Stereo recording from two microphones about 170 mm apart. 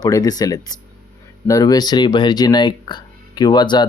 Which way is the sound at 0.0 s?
20° left (ahead or behind).